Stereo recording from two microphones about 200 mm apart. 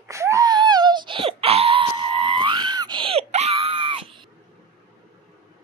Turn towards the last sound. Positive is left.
turn(degrees=-25)  # may be behind; listen again after turning